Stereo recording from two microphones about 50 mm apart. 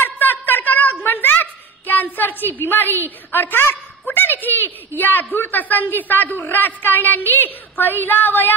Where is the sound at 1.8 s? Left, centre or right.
Left.